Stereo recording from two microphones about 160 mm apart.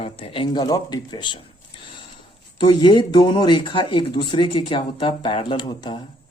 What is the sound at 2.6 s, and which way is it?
A woman's voice, 30° left (ahead or behind).